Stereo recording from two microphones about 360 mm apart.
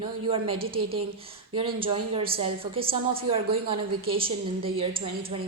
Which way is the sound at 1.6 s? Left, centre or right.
Centre.